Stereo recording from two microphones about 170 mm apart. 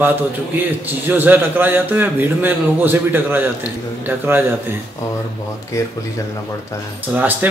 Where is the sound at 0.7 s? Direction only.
10° right (ahead or behind).